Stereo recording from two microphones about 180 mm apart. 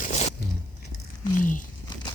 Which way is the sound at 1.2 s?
50° left (ahead or behind).